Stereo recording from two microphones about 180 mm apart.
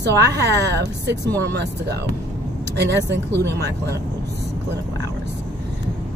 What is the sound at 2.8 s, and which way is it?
Speech, 70° right (ahead or behind).